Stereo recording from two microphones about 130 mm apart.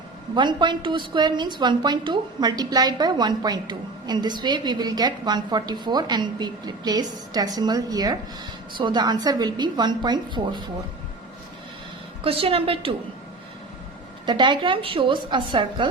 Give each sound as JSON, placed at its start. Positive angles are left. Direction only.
{"t": 0.3, "sound": "a woman's voice", "side_deg": -35}
{"t": 12.2, "sound": "a woman's voice", "side_deg": -45}
{"t": 14.3, "sound": "a woman's voice", "side_deg": -35}